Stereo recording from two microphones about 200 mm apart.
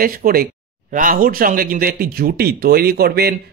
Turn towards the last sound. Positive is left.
turn(degrees=-50)  # may be behind; listen again after turning